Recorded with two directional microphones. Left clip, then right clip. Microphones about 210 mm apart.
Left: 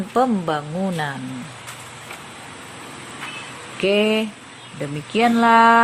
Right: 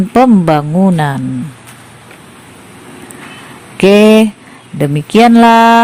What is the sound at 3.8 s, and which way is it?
Speech, 50° right (ahead or behind).